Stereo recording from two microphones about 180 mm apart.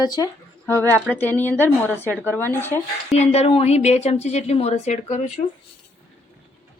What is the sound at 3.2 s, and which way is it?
A woman's voice, 35° left (ahead or behind).